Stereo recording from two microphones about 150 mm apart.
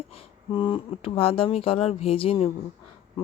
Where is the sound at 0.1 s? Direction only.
35° left (ahead or behind).